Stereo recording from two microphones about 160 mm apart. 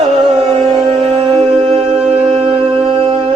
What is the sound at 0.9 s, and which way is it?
Music, 40° right (ahead or behind).